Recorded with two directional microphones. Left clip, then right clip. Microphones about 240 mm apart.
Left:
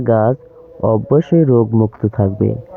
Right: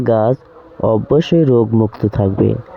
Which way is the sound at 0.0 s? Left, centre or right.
Right.